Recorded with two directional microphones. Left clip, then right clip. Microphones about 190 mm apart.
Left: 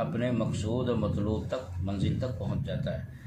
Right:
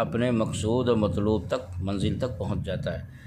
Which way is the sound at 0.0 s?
60° right (ahead or behind).